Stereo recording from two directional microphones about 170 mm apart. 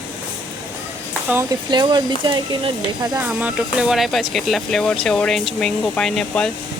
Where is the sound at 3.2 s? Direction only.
5° right (ahead or behind).